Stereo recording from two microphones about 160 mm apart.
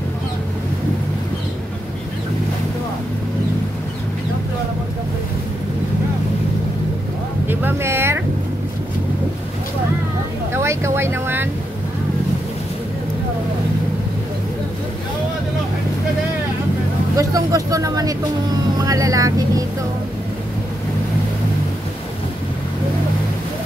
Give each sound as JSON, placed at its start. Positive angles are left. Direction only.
{"t": 7.4, "sound": "vehicle", "side_deg": -15}
{"t": 10.5, "sound": "a sound", "side_deg": -15}
{"t": 17.2, "sound": "speech", "side_deg": -20}
{"t": 18.8, "sound": "vehicle", "side_deg": -20}